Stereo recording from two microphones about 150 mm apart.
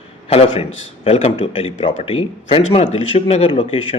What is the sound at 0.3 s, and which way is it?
A man's voice, 40° left (ahead or behind).